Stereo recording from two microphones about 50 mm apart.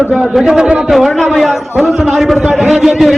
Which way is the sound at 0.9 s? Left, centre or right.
Centre.